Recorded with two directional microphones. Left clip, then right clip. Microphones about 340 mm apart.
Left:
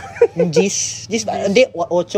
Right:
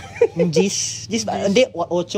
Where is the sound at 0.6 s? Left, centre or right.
Centre.